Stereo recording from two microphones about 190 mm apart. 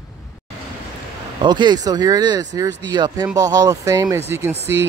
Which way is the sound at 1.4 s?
25° right (ahead or behind).